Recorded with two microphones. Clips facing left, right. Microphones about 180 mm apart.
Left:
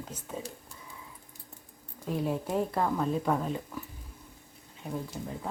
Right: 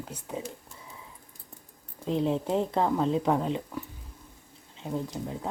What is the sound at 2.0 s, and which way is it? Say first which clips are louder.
Speech: right 4 dB; 25° right (ahead or behind).